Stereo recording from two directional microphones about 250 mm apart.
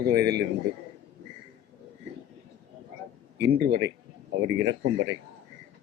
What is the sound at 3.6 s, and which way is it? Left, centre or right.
Speech, right.